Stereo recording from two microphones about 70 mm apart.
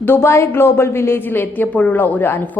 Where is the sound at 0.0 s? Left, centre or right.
Left.